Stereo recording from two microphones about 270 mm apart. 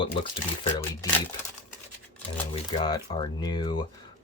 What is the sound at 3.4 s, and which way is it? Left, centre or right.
Speech, centre.